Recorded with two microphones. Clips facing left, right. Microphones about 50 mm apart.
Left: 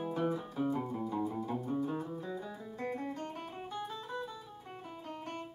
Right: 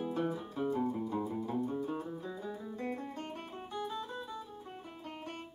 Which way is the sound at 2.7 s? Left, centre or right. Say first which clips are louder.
Left 2 dB; left.